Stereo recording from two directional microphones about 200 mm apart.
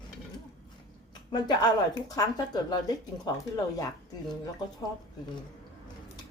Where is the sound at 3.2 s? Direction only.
15° left (ahead or behind).